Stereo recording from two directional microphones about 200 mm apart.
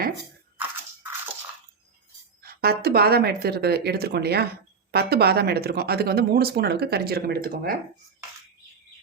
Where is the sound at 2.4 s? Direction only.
50° right (ahead or behind).